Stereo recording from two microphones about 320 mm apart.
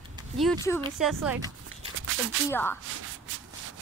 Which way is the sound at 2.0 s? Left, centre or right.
Right.